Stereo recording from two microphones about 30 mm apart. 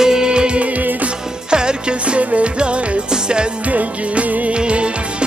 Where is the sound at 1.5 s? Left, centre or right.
Right.